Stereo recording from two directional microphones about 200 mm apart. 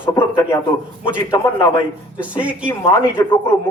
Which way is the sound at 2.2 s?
5° right (ahead or behind).